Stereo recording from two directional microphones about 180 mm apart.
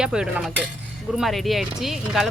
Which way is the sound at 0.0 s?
5° right (ahead or behind).